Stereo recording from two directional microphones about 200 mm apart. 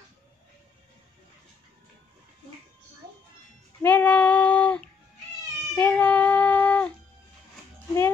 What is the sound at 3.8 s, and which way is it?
Female singing, 10° left (ahead or behind).